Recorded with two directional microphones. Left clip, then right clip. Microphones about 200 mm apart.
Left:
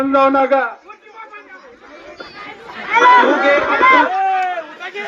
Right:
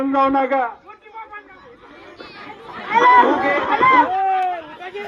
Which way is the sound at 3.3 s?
10° right (ahead or behind).